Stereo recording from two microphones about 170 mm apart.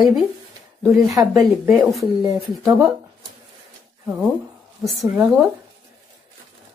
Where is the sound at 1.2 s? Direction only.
20° right (ahead or behind).